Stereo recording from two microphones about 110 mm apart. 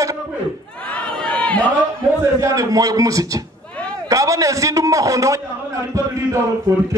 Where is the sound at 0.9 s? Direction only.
10° left (ahead or behind).